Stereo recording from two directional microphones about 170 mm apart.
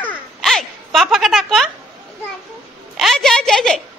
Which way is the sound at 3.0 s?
Centre (ahead or behind).